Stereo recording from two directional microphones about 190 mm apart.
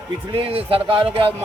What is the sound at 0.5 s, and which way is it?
Speech, 30° right (ahead or behind).